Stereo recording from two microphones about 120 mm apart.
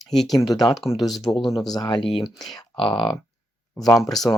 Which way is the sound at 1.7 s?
35° left (ahead or behind).